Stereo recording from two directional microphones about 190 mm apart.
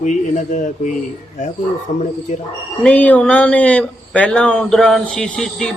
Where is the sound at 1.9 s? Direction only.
40° left (ahead or behind).